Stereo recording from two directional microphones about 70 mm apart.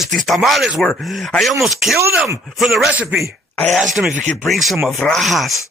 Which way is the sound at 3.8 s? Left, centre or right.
Centre.